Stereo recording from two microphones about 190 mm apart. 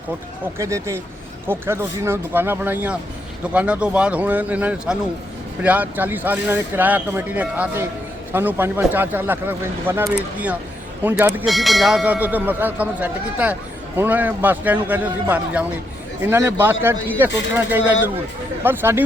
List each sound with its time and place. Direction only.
0.6 s speech: 15° right (ahead or behind)
11.4 s speech: centre (ahead or behind)